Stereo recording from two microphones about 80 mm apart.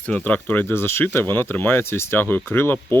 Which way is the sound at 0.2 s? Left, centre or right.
Left.